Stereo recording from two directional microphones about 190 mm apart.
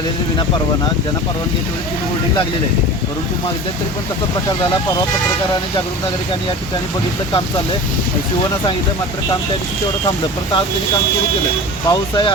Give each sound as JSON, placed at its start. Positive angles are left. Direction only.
{"t": 11.9, "sound": "speech", "side_deg": 25}